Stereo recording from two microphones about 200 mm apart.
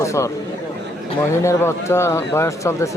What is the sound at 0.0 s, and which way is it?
Speech, 15° left (ahead or behind).